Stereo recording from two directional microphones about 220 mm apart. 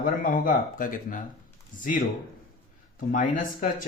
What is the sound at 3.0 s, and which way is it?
Speech, 35° left (ahead or behind).